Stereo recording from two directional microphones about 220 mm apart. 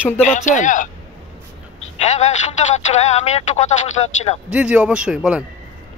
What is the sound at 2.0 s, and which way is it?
Speech, 30° left (ahead or behind).